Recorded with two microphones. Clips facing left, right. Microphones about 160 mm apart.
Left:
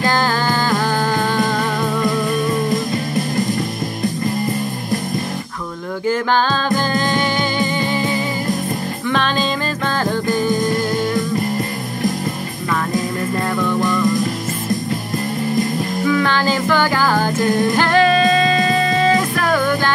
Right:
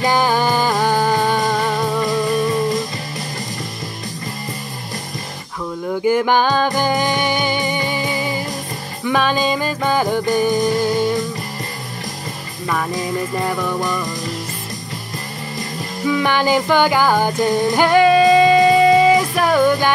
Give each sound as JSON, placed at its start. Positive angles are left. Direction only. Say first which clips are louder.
{"t": 0.0, "sound": "music", "louder": "right 2 dB", "side_deg": -15}
{"t": 6.0, "sound": "music", "louder": "right 2 dB", "side_deg": -15}
{"t": 9.0, "sound": "music", "louder": "right 3 dB", "side_deg": -10}
{"t": 13.7, "sound": "music", "louder": "left 3 dB", "side_deg": -15}
{"t": 16.1, "sound": "music", "louder": "right 2 dB", "side_deg": -15}